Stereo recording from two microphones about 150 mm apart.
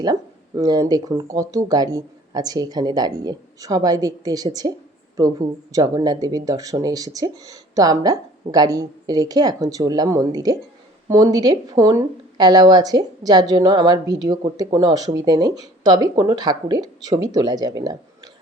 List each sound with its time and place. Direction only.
0.0 s a woman's voice: 25° right (ahead or behind)